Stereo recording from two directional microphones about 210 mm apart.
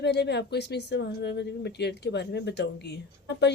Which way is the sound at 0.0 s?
55° left (ahead or behind).